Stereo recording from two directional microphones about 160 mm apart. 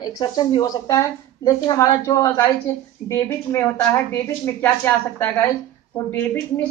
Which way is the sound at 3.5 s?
15° left (ahead or behind).